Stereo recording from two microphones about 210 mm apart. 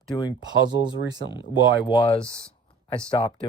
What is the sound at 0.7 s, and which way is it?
Speech, 20° right (ahead or behind).